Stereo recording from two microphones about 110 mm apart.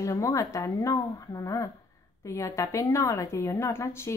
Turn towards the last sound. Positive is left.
turn(degrees=25)  # may be behind; listen again after turning